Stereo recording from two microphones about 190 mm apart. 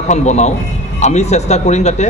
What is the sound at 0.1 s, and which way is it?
Speech, 35° left (ahead or behind).